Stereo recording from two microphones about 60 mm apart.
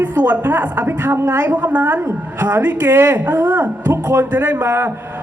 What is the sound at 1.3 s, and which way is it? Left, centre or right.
A woman's voice, right.